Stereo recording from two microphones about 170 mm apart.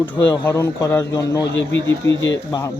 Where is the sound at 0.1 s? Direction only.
15° left (ahead or behind).